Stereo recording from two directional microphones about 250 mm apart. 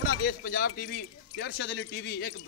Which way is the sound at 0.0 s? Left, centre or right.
Left.